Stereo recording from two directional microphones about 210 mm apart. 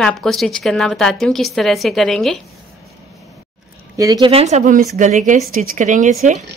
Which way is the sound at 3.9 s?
15° right (ahead or behind).